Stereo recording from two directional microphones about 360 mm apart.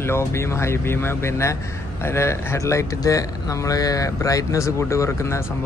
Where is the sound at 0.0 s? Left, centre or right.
Centre.